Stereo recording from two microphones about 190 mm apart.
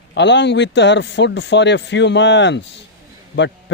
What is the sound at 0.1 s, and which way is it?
A man's voice, 70° left (ahead or behind).